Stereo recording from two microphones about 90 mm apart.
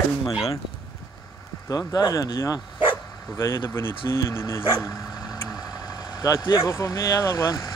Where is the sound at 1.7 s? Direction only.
40° left (ahead or behind).